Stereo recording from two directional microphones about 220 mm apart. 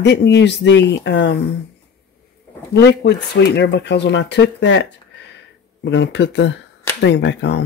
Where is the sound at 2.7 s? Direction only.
50° left (ahead or behind).